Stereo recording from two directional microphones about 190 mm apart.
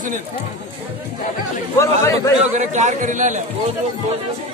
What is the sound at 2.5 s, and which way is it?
Speech, 40° right (ahead or behind).